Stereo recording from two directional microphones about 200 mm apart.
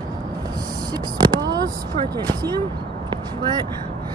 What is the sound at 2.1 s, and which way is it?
Speech, 20° right (ahead or behind).